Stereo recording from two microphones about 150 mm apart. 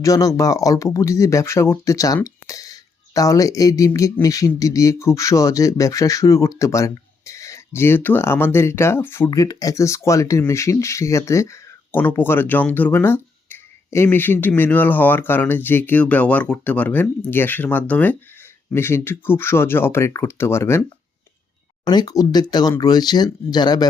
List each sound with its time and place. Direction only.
0.0 s speech: 20° left (ahead or behind)
21.8 s speech: 25° left (ahead or behind)